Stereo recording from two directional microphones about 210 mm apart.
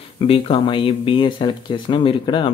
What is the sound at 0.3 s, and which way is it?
Speech, 25° left (ahead or behind).